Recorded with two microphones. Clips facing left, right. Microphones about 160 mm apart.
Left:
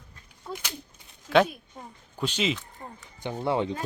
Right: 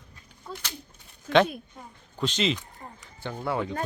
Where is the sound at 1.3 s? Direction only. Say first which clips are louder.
Even; 5° left (ahead or behind).